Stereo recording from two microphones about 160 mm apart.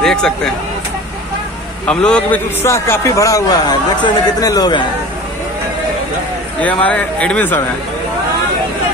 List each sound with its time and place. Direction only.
0.0 s vehicle: 5° left (ahead or behind)
1.9 s a man's voice: 5° left (ahead or behind)
2.6 s speech: 15° left (ahead or behind)
6.6 s speech: 10° left (ahead or behind)